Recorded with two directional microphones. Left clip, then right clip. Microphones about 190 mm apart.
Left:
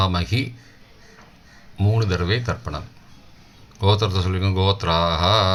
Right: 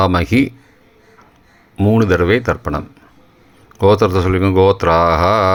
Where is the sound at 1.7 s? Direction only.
40° right (ahead or behind).